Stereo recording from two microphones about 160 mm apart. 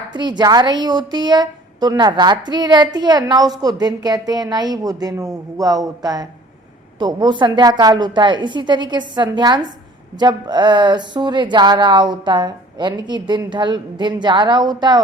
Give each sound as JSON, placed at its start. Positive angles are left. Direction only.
{"t": 0.1, "sound": "a woman's voice", "side_deg": -25}